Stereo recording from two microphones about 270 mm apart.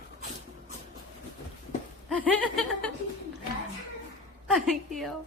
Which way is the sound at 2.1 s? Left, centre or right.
Centre.